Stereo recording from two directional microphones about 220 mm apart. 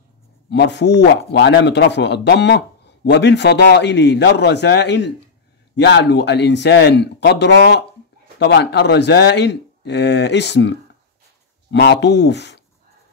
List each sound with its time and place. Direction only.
0.5 s speech: 50° left (ahead or behind)